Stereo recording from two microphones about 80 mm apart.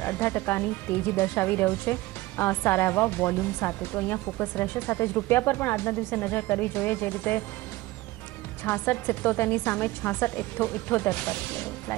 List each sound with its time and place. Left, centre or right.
0.0 s speech: left
8.6 s speech: left